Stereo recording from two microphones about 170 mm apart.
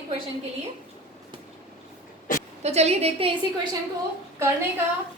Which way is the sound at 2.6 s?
40° right (ahead or behind).